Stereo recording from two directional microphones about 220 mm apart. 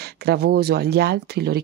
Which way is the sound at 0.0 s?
45° right (ahead or behind).